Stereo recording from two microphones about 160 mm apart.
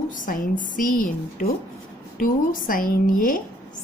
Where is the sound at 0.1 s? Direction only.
55° left (ahead or behind).